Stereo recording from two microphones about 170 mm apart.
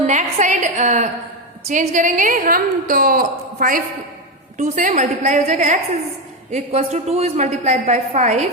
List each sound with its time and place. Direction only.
0.0 s a woman's voice: 45° right (ahead or behind)